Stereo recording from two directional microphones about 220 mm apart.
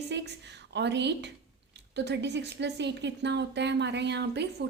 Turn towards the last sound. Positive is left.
turn(degrees=-50)  # may be behind; listen again after turning